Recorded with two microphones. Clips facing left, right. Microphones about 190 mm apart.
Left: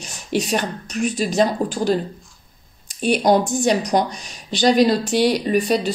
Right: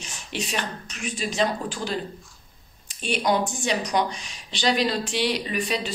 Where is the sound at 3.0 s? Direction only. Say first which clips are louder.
Left 7 dB; 40° left (ahead or behind).